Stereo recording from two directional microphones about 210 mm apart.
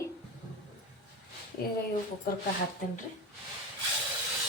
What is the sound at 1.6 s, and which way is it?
Speech, 45° left (ahead or behind).